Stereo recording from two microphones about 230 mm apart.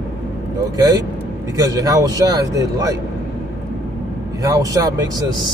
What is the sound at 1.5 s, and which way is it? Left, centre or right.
Speech, centre.